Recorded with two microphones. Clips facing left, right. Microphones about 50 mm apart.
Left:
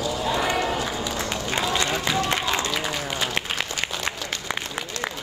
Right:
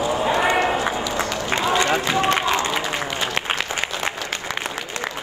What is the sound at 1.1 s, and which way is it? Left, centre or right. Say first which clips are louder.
Run: right 4 dB; right.